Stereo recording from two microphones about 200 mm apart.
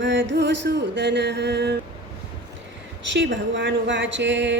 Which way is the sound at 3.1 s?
65° right (ahead or behind).